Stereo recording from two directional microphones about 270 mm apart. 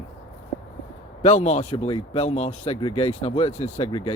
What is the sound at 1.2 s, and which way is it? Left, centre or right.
Speech, left.